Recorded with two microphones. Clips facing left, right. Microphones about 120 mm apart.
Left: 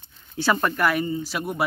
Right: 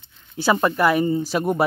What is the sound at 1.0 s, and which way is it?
Speech, 35° right (ahead or behind).